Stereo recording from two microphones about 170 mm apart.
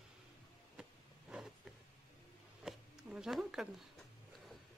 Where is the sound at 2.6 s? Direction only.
5° right (ahead or behind).